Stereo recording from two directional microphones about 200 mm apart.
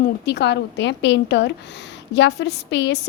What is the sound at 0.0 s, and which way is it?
A woman's voice, 55° left (ahead or behind).